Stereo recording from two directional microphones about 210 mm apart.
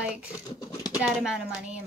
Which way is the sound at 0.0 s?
5° right (ahead or behind).